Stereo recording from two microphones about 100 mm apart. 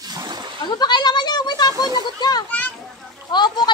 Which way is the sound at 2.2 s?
45° left (ahead or behind).